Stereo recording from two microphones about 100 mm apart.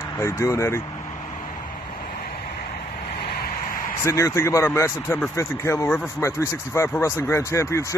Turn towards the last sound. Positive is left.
turn(degrees=30)  # may be behind; listen again after turning